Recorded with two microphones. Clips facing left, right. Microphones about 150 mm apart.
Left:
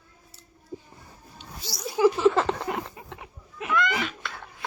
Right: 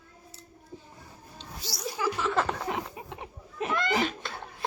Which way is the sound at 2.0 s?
30° left (ahead or behind).